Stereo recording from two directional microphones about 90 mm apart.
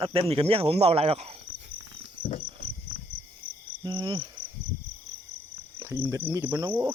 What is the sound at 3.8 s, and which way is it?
Cricket, 50° right (ahead or behind).